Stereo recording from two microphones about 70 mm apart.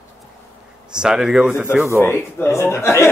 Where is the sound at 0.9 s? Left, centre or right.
Centre.